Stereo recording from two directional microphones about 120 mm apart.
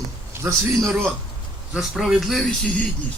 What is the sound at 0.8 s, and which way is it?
A man's voice, 5° left (ahead or behind).